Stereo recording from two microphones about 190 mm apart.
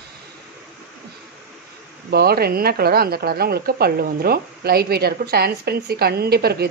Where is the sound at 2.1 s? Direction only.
55° right (ahead or behind).